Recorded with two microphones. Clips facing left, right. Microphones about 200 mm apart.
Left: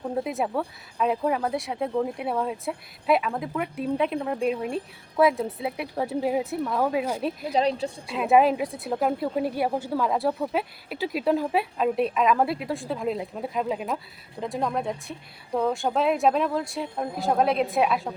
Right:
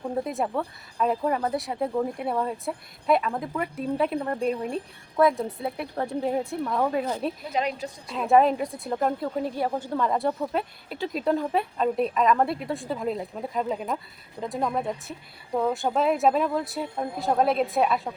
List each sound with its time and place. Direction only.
0.0 s speech: centre (ahead or behind)
7.5 s speech: 30° left (ahead or behind)
8.0 s speech: 5° left (ahead or behind)